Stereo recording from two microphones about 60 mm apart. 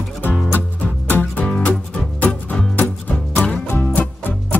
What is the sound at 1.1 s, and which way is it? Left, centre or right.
Music, left.